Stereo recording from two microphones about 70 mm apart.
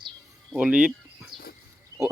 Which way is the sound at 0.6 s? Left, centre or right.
Centre.